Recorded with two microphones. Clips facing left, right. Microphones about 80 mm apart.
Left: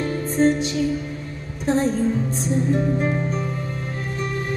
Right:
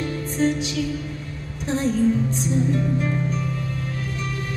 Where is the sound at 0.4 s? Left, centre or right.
Left.